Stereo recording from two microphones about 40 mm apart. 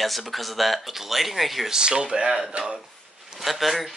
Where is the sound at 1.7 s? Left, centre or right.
Centre.